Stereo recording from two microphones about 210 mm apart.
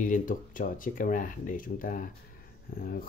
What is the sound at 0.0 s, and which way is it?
Speech, 40° left (ahead or behind).